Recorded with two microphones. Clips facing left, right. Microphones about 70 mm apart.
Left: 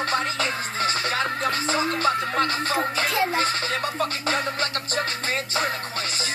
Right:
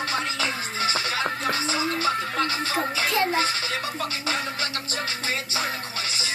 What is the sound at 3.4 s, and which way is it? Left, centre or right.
Music, left.